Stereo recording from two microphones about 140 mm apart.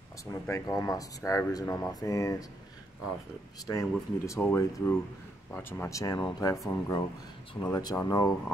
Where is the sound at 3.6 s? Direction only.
25° left (ahead or behind).